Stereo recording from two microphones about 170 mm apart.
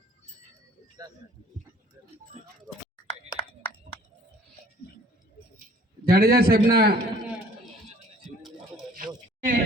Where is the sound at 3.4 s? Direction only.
35° left (ahead or behind).